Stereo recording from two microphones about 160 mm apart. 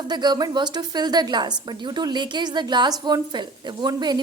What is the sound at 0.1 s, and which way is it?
A woman's voice, 25° right (ahead or behind).